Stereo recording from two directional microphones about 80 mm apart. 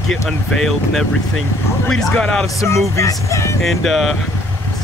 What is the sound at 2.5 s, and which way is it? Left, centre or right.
Speech, left.